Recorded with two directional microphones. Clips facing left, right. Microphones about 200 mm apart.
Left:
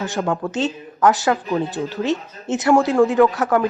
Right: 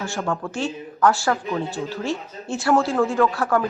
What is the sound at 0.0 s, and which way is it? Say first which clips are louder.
Speech: left 4 dB; 20° left (ahead or behind).